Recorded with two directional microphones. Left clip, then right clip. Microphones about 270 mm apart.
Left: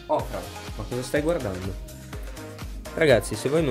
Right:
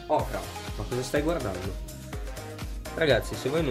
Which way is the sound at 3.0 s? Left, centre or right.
Left.